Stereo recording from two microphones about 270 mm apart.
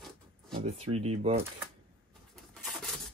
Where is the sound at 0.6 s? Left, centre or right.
Right.